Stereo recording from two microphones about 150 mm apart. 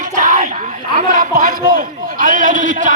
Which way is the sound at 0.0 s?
60° right (ahead or behind).